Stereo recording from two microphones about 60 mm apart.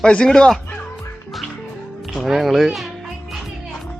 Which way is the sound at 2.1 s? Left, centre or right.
Centre.